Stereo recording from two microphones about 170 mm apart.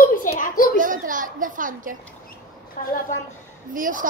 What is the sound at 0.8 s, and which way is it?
A woman's voice, 50° right (ahead or behind).